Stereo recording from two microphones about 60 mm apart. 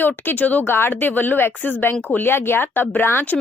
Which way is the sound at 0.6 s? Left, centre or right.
Left.